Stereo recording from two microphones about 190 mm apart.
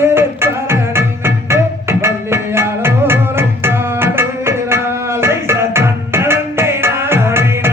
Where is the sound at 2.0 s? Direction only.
15° right (ahead or behind).